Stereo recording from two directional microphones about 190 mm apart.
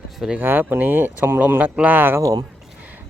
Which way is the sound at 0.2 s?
5° right (ahead or behind).